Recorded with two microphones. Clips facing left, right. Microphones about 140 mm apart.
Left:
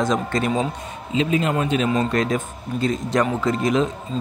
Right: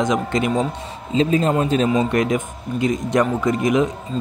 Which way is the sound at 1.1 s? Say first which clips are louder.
Right 3 dB; 35° right (ahead or behind).